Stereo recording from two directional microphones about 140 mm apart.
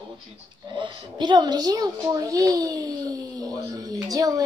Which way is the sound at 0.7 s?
35° right (ahead or behind).